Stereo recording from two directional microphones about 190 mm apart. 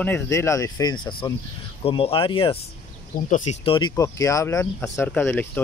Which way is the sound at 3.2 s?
40° left (ahead or behind).